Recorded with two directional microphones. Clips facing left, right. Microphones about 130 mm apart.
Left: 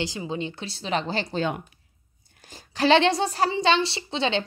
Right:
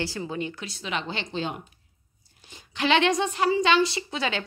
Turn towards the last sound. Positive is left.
turn(degrees=25)  # may be behind; listen again after turning